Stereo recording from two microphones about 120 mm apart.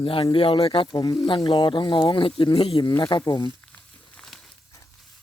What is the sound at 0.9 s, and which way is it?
Speech, 35° left (ahead or behind).